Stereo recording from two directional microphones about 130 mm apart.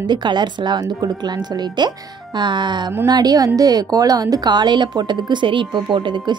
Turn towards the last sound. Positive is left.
turn(degrees=-40)  # may be behind; listen again after turning